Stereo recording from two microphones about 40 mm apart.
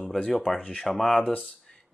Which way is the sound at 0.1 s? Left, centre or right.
Centre.